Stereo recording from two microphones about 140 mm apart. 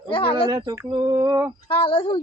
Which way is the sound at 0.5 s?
30° right (ahead or behind).